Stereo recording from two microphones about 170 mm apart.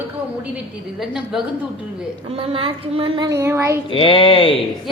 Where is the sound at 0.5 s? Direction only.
5° right (ahead or behind).